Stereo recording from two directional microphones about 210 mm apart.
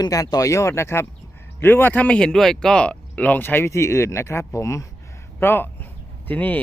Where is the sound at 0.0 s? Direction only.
15° left (ahead or behind).